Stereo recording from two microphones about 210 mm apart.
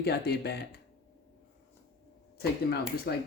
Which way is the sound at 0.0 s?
50° left (ahead or behind).